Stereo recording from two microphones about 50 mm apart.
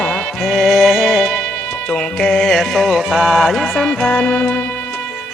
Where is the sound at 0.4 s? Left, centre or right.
Centre.